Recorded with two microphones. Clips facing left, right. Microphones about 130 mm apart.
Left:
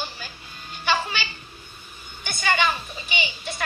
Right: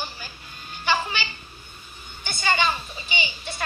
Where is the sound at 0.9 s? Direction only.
15° right (ahead or behind).